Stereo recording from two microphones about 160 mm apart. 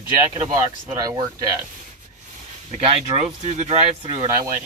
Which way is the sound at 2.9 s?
40° right (ahead or behind).